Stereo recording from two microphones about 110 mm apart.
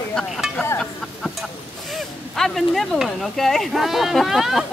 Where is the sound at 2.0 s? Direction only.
Centre (ahead or behind).